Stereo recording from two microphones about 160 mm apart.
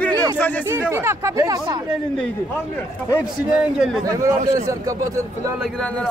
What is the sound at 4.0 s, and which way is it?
Speech, 20° right (ahead or behind).